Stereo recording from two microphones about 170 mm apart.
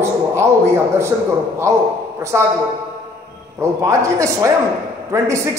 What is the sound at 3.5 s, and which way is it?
A man's voice, 20° right (ahead or behind).